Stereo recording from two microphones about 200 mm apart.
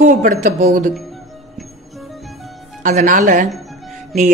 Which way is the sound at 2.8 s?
40° right (ahead or behind).